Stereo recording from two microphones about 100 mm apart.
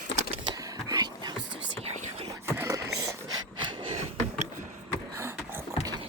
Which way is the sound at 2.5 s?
30° right (ahead or behind).